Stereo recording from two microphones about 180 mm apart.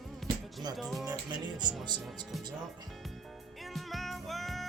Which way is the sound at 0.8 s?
Centre (ahead or behind).